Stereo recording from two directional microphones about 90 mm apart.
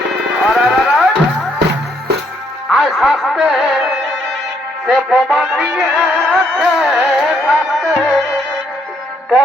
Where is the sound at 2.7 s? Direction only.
Centre (ahead or behind).